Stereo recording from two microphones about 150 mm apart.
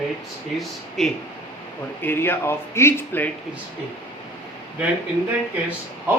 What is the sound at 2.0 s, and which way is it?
Speech, 15° left (ahead or behind).